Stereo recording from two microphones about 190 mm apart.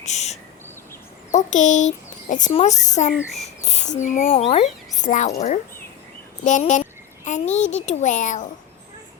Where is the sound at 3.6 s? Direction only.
35° left (ahead or behind).